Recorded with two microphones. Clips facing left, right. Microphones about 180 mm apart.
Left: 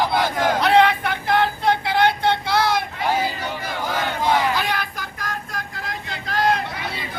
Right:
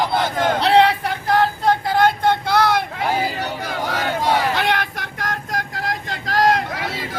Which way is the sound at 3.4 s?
70° right (ahead or behind).